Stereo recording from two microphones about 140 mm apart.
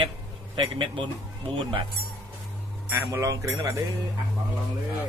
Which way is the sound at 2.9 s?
20° right (ahead or behind).